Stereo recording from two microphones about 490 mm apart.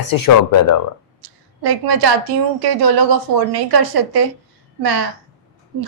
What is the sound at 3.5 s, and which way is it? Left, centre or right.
Speech, right.